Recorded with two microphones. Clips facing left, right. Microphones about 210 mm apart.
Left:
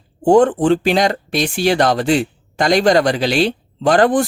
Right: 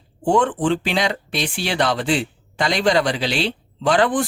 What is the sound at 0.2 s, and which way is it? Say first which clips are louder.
Speech: left 7 dB; 40° left (ahead or behind).